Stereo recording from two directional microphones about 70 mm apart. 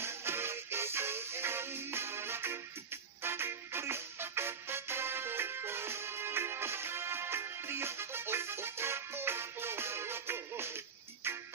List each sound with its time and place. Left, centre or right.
0.0 s music: right